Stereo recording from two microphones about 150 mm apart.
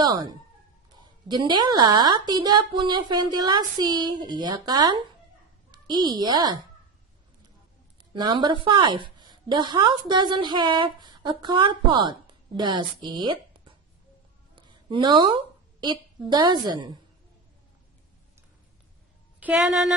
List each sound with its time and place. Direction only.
0.0 s a woman's voice: 25° right (ahead or behind)
8.1 s a woman's voice: 30° right (ahead or behind)
19.4 s speech: centre (ahead or behind)